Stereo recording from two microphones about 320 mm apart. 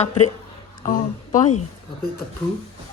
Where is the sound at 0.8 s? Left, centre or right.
Left.